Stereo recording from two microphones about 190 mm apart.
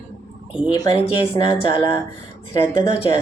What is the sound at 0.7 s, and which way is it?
Speech, 25° left (ahead or behind).